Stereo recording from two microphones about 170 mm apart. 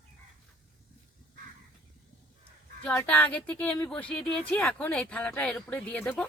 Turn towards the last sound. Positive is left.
turn(degrees=5)  # may be behind; listen again after turning